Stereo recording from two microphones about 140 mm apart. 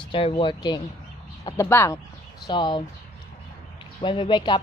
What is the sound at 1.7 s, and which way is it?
Speech, 15° left (ahead or behind).